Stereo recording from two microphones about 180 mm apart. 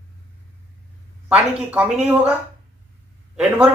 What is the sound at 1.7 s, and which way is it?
Speech, 10° right (ahead or behind).